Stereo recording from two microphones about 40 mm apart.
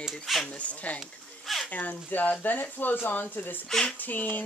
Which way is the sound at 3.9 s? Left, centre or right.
Left.